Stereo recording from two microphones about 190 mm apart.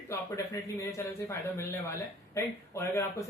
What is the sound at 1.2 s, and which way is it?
Speech, 15° left (ahead or behind).